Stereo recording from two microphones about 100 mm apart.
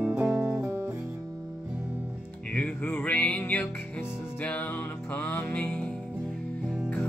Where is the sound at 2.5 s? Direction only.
15° left (ahead or behind).